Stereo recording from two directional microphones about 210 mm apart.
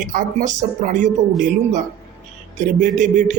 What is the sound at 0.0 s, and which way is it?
A man's voice, 40° right (ahead or behind).